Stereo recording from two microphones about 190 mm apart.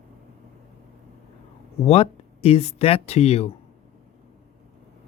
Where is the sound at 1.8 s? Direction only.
30° left (ahead or behind).